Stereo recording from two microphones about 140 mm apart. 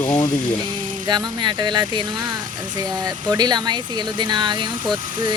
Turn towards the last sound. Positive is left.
turn(degrees=-35)  # may be behind; listen again after turning